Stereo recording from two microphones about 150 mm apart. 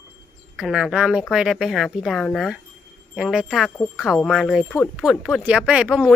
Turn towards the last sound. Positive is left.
turn(degrees=-5)  # may be behind; listen again after turning